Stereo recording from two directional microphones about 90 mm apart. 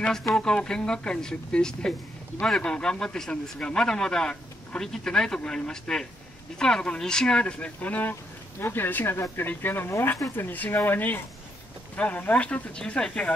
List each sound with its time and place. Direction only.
0.3 s a man's voice: 10° left (ahead or behind)